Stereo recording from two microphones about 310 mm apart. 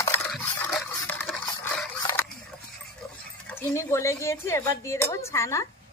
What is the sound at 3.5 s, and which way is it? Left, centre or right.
Speech, centre.